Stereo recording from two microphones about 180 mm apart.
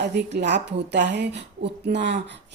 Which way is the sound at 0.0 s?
75° right (ahead or behind).